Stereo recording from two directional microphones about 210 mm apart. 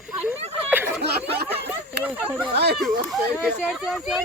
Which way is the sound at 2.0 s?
5° right (ahead or behind).